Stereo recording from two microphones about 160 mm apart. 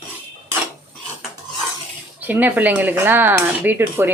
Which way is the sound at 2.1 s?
10° right (ahead or behind).